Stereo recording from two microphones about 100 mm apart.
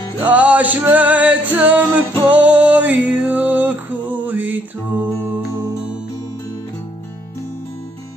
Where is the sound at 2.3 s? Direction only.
15° right (ahead or behind).